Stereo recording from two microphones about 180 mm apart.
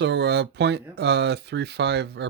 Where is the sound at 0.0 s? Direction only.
75° right (ahead or behind).